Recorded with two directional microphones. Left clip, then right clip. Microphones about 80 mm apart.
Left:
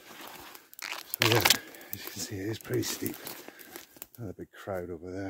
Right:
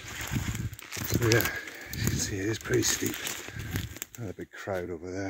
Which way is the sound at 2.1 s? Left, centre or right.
Centre.